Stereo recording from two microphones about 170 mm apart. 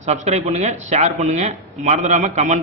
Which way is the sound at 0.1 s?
40° right (ahead or behind).